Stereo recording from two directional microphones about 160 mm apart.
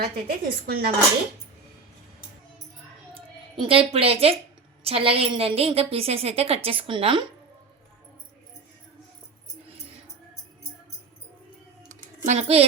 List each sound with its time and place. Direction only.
0.0 s a woman's voice: 75° right (ahead or behind)
3.2 s a woman's voice: 35° right (ahead or behind)
11.9 s typing: 45° right (ahead or behind)